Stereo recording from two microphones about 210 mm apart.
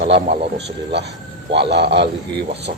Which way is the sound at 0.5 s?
55° right (ahead or behind).